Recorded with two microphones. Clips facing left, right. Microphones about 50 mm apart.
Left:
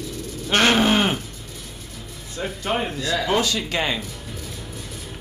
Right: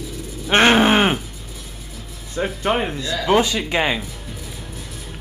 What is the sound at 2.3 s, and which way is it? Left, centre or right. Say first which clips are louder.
Wild animals: right 5 dB; right.